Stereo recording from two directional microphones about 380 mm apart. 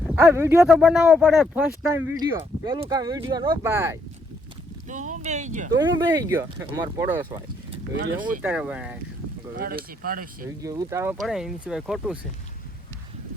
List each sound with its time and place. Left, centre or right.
0.2 s speech: centre
4.9 s speech: centre
7.7 s speech: right
8.4 s speech: centre
9.6 s speech: right
10.6 s speech: centre